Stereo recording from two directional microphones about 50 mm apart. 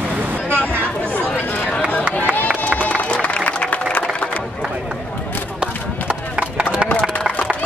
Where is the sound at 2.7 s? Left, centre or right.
Left.